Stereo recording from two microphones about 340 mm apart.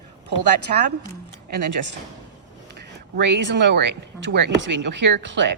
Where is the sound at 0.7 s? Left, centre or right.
Right.